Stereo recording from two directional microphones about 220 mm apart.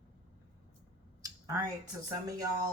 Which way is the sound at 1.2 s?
15° right (ahead or behind).